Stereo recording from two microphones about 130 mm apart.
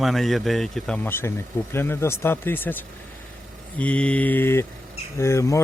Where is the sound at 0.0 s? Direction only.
Centre (ahead or behind).